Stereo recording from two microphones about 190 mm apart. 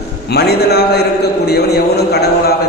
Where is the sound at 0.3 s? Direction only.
60° left (ahead or behind).